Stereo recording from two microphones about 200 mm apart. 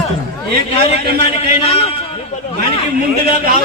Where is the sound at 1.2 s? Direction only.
30° left (ahead or behind).